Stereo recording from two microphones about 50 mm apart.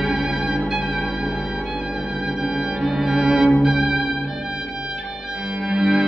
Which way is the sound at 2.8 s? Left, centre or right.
Centre.